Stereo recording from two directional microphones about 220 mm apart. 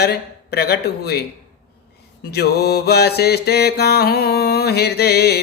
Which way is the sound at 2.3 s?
45° left (ahead or behind).